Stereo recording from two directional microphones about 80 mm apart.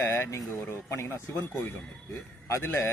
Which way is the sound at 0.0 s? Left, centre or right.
Left.